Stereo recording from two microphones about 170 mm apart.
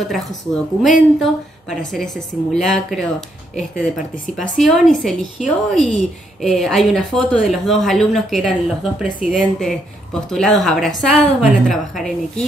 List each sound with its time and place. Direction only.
0.8 s a woman's voice: centre (ahead or behind)
4.1 s a woman's voice: 50° left (ahead or behind)
4.6 s a woman's voice: centre (ahead or behind)